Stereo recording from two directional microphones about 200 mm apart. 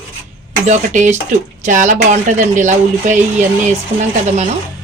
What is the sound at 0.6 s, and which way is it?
Speech, 35° right (ahead or behind).